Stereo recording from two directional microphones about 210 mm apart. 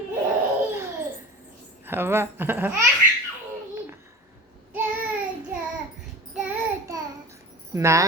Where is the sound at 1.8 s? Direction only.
10° right (ahead or behind).